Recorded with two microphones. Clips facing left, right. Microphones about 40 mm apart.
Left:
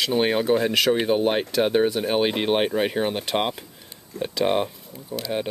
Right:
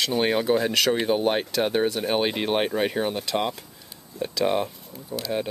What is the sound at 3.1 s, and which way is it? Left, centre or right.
Speech, left.